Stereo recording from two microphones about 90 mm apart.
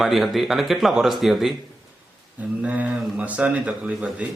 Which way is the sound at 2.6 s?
15° right (ahead or behind).